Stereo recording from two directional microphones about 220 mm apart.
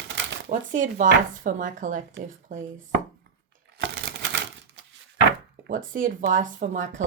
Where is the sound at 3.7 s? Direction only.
50° right (ahead or behind).